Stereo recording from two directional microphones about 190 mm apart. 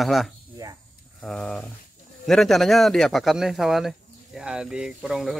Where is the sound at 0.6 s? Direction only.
15° right (ahead or behind).